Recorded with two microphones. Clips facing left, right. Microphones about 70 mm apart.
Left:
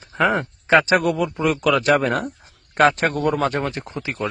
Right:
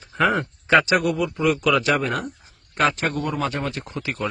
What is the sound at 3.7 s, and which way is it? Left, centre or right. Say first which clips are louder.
Speech: left 1 dB; left.